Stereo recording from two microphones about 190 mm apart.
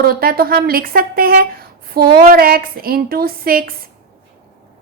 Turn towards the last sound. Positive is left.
turn(degrees=-50)  # may be behind; listen again after turning